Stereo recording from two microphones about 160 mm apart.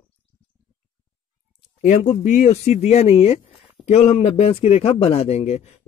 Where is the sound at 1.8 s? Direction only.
50° left (ahead or behind).